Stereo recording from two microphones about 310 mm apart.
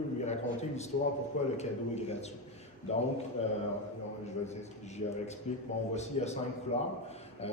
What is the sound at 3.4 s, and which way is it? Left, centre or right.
Speech, centre.